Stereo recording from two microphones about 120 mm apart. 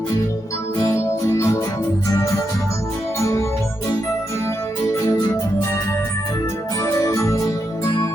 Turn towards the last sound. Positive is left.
turn(degrees=25)  # may be behind; listen again after turning